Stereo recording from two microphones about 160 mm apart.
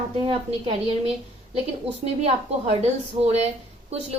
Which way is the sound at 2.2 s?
40° right (ahead or behind).